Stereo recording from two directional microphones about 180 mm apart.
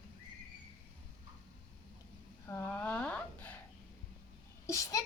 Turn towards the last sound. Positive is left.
turn(degrees=20)  # may be behind; listen again after turning